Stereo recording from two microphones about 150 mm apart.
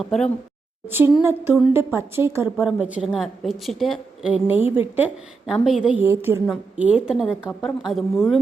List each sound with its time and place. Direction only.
0.0 s a woman's voice: 5° left (ahead or behind)
0.9 s a woman's voice: 15° right (ahead or behind)